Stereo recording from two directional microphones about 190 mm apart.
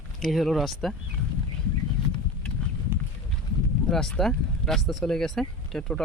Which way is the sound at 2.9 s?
10° right (ahead or behind).